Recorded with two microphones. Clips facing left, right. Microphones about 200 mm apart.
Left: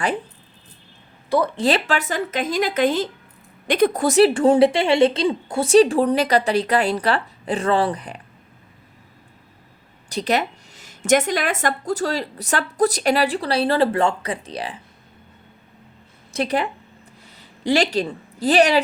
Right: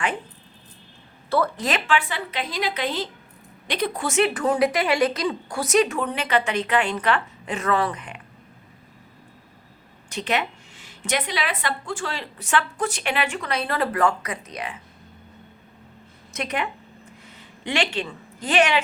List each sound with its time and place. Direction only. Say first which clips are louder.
1.5 s a woman's voice: left 4 dB; 35° left (ahead or behind)
10.1 s a woman's voice: left 4 dB; 35° left (ahead or behind)
16.3 s a woman's voice: left 6 dB; 35° left (ahead or behind)